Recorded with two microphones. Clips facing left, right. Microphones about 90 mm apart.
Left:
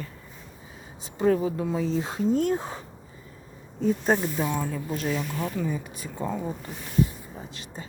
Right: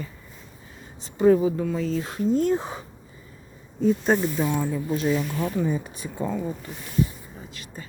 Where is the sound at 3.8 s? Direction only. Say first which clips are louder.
Right 3 dB; centre (ahead or behind).